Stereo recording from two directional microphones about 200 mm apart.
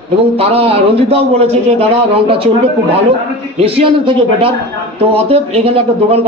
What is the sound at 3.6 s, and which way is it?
A man's voice, 25° right (ahead or behind).